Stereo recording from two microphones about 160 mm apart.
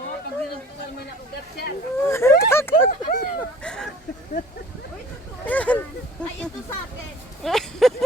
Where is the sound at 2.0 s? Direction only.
15° left (ahead or behind).